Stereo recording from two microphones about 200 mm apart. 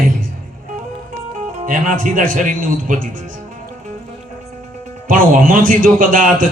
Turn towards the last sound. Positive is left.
turn(degrees=-45)  # may be behind; listen again after turning